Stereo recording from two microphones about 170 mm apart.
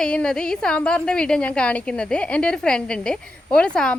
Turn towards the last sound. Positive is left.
turn(degrees=5)  # may be behind; listen again after turning